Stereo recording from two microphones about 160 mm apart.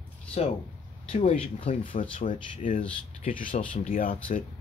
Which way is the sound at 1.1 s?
40° left (ahead or behind).